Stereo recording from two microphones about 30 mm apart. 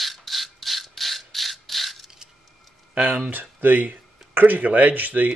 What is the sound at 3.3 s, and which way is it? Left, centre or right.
Speech, right.